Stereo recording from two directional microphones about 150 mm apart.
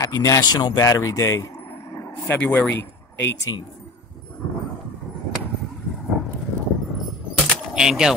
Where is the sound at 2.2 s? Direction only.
10° left (ahead or behind).